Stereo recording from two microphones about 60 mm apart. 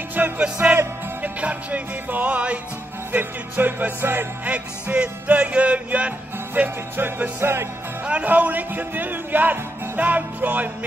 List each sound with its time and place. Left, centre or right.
0.4 s music: centre; by 4.3 s right
4.5 s music: right
7.3 s music: right
8.0 s music: right